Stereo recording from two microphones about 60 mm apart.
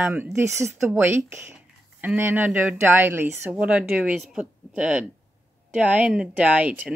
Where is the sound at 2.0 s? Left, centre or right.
Right.